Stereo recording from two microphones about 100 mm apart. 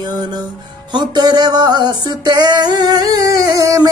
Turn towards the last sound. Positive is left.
turn(degrees=-35)  # may be behind; listen again after turning